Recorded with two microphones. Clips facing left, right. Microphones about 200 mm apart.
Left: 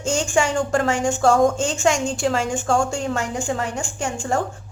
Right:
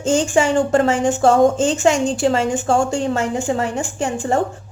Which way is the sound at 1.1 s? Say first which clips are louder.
Right 1 dB; 20° right (ahead or behind).